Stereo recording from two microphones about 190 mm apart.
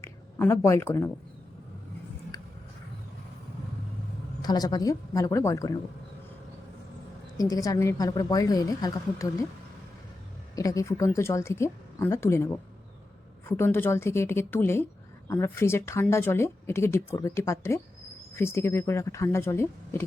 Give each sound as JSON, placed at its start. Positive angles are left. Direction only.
{"t": 0.0, "sound": "a woman's voice", "side_deg": 15}
{"t": 4.4, "sound": "a woman's voice", "side_deg": 20}
{"t": 7.3, "sound": "a woman's voice", "side_deg": 20}
{"t": 10.5, "sound": "speech", "side_deg": 20}
{"t": 13.5, "sound": "speech", "side_deg": 10}